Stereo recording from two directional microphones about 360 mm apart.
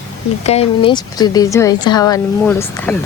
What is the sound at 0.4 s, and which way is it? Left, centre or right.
Speech, centre.